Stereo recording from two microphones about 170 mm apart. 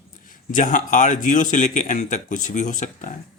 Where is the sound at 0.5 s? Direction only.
50° left (ahead or behind).